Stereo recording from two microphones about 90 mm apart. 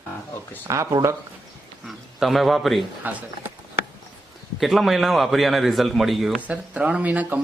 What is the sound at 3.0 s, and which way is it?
Speech, 20° right (ahead or behind).